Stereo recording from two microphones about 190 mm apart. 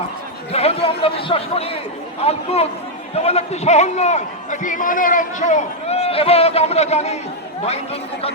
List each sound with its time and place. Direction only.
0.5 s a man's voice: 30° left (ahead or behind)